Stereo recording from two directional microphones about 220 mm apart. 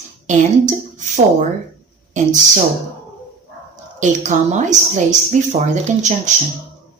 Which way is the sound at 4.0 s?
35° right (ahead or behind).